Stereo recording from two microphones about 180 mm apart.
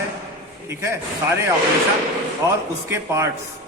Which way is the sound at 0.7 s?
15° right (ahead or behind).